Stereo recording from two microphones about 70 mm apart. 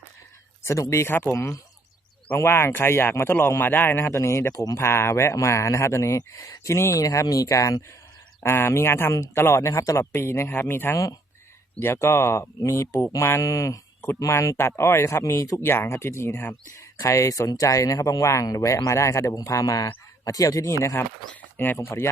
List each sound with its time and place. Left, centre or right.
0.6 s speech: left
4.0 s speech: left
8.4 s speech: left
13.0 s speech: left
13.4 s speech: left
17.0 s speech: left
20.8 s speech: left